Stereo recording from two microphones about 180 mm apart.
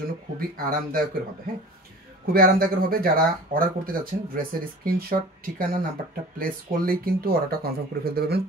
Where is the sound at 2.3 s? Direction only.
55° right (ahead or behind).